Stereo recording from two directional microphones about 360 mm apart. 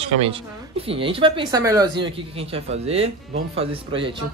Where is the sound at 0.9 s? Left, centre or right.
Centre.